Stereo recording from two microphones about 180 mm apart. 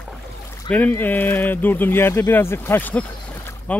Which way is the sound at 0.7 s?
10° left (ahead or behind).